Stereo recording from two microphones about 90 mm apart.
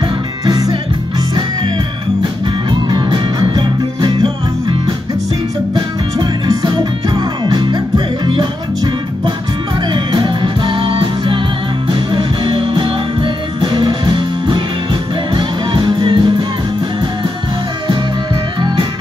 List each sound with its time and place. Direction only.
0.5 s music: 50° right (ahead or behind)
2.9 s music: 60° right (ahead or behind)
5.8 s music: 45° right (ahead or behind); by 16.4 s 70° right (ahead or behind)